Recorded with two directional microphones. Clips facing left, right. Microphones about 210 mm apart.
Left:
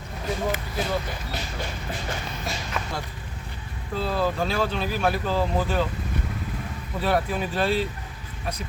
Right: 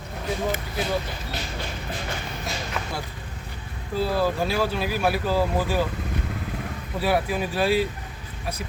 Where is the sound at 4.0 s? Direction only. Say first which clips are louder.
Right 2 dB; 5° right (ahead or behind).